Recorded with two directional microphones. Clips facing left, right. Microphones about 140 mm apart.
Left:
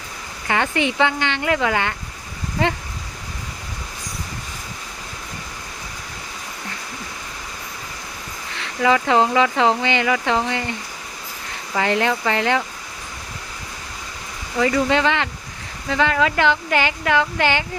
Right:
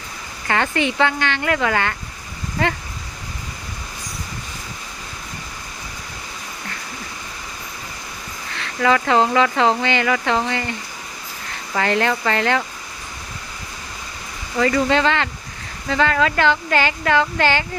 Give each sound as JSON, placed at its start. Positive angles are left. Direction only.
{"t": 0.4, "sound": "speech", "side_deg": 10}
{"t": 8.8, "sound": "speech", "side_deg": 15}
{"t": 11.8, "sound": "speech", "side_deg": 15}
{"t": 14.6, "sound": "speech", "side_deg": 10}